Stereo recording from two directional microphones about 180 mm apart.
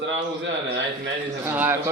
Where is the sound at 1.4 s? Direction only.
10° right (ahead or behind).